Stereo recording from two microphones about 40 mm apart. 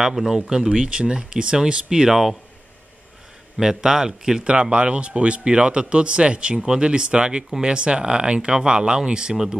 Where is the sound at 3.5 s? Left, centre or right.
Centre.